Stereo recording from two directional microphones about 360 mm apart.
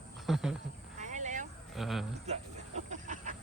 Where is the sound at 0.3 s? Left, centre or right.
Centre.